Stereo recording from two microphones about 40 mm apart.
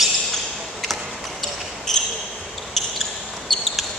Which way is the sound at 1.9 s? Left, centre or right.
Centre.